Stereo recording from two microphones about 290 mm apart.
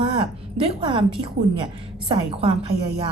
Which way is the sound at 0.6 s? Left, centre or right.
Centre.